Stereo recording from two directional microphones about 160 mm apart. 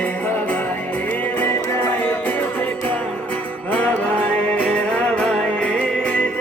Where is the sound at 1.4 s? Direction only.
10° left (ahead or behind).